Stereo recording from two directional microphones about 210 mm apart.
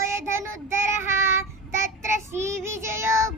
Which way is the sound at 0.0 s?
10° right (ahead or behind).